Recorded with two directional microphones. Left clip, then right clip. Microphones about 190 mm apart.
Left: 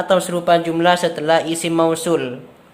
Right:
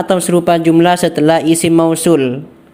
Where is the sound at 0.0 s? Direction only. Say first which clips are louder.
Right 4 dB; 30° right (ahead or behind).